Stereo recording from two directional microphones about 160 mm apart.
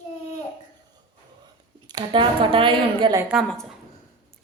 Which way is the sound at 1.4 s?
25° right (ahead or behind).